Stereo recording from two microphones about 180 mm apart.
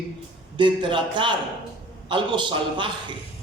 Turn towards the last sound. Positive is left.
turn(degrees=-25)  # may be behind; listen again after turning